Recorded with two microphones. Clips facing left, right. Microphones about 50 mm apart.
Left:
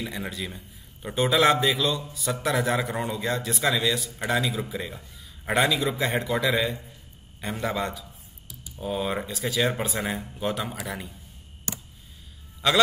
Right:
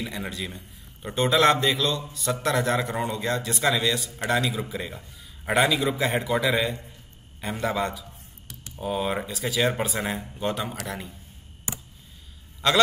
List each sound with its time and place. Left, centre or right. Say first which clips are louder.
0.0 s a man's voice: even; centre
11.7 s a sound: even; right
12.6 s a man's voice: right 1 dB; centre